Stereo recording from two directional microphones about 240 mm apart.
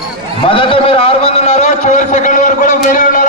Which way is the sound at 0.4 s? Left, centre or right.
Left.